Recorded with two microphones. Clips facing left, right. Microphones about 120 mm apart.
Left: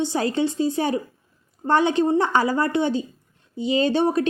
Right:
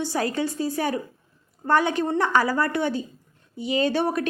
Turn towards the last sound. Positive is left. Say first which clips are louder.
# left 3 dB
turn(degrees=25)  # may be behind; listen again after turning